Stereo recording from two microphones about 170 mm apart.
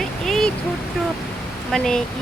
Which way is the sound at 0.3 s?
Centre (ahead or behind).